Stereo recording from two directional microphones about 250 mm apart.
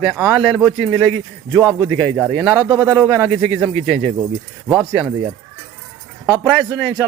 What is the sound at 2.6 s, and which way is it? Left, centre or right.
Speech, centre.